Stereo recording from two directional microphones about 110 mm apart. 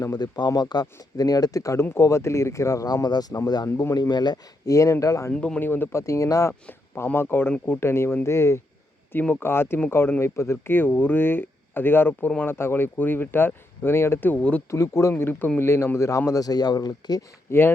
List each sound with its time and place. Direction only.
0.0 s speech: 40° left (ahead or behind)
5.3 s speech: 10° left (ahead or behind); by 6.5 s 30° left (ahead or behind)
6.5 s speech: 20° left (ahead or behind)
14.7 s speech: 25° left (ahead or behind)
17.5 s speech: 25° left (ahead or behind)